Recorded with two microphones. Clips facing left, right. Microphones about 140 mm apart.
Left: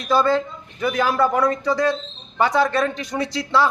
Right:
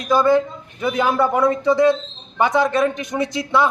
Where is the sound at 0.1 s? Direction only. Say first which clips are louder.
Right 3 dB; 15° right (ahead or behind).